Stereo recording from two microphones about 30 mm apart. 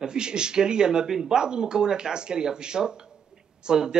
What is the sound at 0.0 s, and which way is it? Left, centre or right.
A man's voice, right.